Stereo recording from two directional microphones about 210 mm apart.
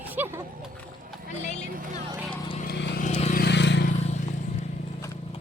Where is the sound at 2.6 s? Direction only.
50° left (ahead or behind).